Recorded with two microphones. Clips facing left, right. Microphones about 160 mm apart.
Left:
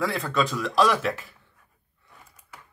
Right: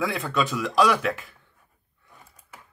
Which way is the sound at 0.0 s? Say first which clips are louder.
Even; centre (ahead or behind).